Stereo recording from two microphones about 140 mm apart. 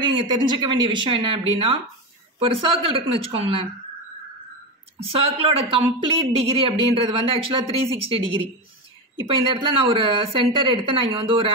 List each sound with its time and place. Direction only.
0.0 s speech: 35° right (ahead or behind)
5.0 s speech: 45° right (ahead or behind)